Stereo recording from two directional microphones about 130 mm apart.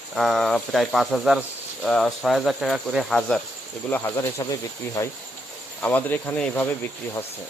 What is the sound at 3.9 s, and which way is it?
Speech, 15° left (ahead or behind).